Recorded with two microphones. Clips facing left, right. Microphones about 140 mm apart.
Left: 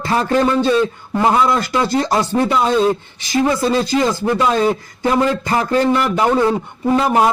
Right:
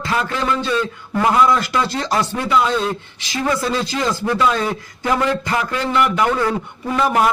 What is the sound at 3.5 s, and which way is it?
A man's voice, 25° left (ahead or behind).